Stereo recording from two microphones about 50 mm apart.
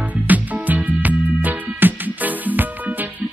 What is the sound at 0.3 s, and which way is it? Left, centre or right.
Music, right.